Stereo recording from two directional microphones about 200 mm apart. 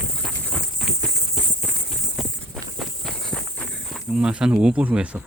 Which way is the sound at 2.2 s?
Centre (ahead or behind).